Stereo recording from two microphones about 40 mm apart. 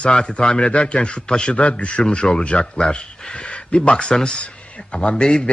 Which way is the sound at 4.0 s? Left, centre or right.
Left.